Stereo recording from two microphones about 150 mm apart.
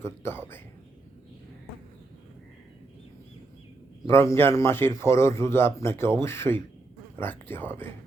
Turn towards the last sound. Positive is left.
turn(degrees=15)  # may be behind; listen again after turning